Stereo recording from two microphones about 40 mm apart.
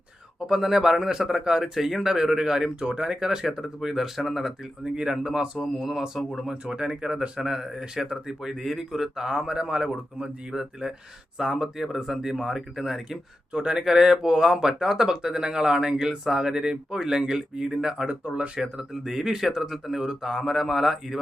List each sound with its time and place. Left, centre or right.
0.3 s speech: centre
4.9 s speech: centre
6.5 s speech: centre
13.5 s speech: right
13.8 s speech: centre
18.3 s speech: right
18.6 s speech: centre
20.3 s speech: centre